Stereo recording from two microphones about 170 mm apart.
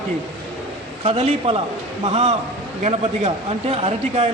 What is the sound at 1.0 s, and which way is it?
Speech, 35° right (ahead or behind).